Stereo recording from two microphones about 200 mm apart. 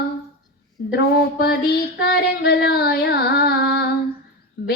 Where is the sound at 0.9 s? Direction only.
55° left (ahead or behind).